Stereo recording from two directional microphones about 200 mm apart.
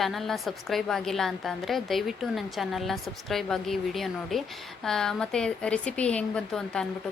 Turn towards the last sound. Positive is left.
turn(degrees=5)  # may be behind; listen again after turning